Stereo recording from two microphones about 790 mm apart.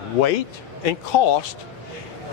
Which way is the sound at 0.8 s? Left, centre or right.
Left.